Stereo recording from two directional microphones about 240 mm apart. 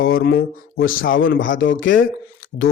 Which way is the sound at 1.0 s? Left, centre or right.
Left.